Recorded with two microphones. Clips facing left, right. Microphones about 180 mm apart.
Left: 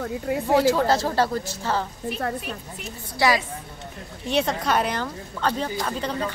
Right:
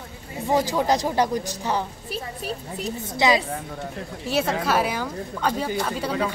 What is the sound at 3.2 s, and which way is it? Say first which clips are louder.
Speech: right 1 dB; 20° right (ahead or behind).